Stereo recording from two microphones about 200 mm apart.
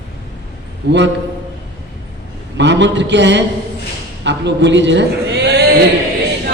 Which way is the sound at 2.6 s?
60° right (ahead or behind).